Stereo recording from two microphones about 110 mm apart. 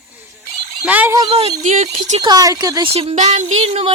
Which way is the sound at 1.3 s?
65° right (ahead or behind).